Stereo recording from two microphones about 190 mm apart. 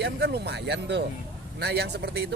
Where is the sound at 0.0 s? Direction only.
60° right (ahead or behind).